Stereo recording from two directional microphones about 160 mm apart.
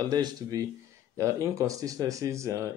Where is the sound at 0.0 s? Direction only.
25° right (ahead or behind).